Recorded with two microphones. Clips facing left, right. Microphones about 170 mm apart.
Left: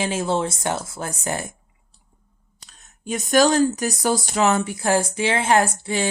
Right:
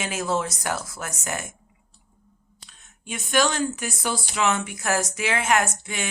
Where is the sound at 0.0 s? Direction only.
30° left (ahead or behind).